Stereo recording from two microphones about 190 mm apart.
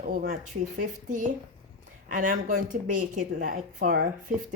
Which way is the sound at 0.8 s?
45° right (ahead or behind).